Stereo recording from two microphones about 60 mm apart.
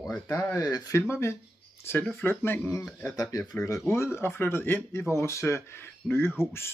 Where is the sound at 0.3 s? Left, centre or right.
Left.